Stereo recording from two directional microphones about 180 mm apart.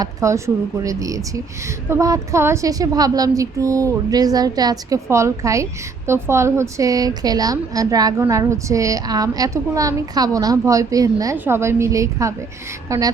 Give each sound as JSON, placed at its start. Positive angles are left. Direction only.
{"t": 0.0, "sound": "a woman's voice", "side_deg": -15}